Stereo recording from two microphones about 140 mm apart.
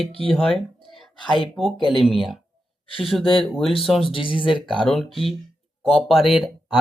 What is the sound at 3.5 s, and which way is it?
Speech, centre (ahead or behind).